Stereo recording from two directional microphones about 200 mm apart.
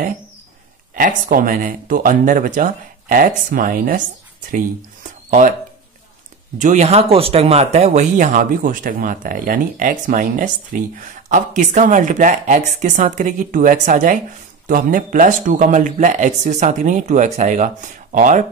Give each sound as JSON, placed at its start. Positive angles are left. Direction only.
{"t": 0.9, "sound": "speech", "side_deg": -45}
{"t": 6.6, "sound": "speech", "side_deg": -35}